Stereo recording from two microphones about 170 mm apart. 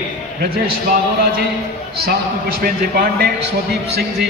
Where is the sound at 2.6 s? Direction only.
65° right (ahead or behind).